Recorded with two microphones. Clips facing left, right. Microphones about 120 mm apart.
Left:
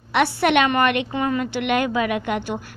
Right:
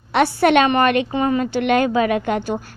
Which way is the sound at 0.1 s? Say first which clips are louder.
Right 3 dB; 40° right (ahead or behind).